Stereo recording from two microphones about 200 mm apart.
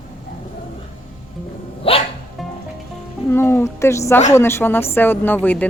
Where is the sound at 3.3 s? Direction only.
10° left (ahead or behind).